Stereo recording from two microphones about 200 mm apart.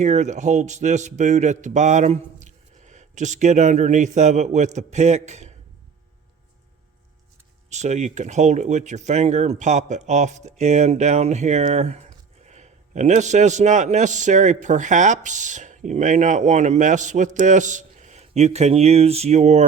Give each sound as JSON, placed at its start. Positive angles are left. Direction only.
{"t": 0.0, "sound": "a man's voice", "side_deg": -35}
{"t": 7.7, "sound": "a man's voice", "side_deg": -35}